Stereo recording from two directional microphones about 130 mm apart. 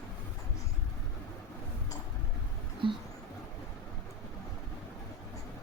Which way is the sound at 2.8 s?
40° right (ahead or behind).